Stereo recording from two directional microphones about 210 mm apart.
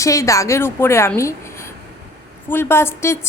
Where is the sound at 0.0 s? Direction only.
15° left (ahead or behind).